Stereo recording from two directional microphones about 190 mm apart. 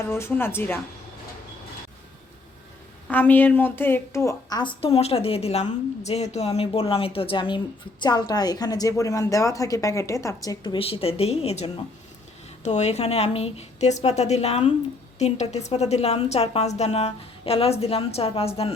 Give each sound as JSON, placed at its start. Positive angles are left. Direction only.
{"t": 0.1, "sound": "a woman's voice", "side_deg": 15}
{"t": 3.1, "sound": "a woman's voice", "side_deg": 10}